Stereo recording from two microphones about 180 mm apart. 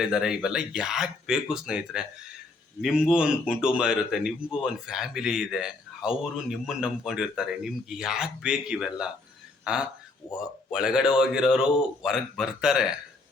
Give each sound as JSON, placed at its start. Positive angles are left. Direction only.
{"t": 0.0, "sound": "speech", "side_deg": -5}
{"t": 10.2, "sound": "a man's voice", "side_deg": 30}
{"t": 10.7, "sound": "speech", "side_deg": -5}